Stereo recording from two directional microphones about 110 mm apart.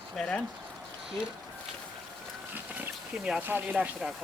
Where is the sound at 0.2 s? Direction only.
10° left (ahead or behind).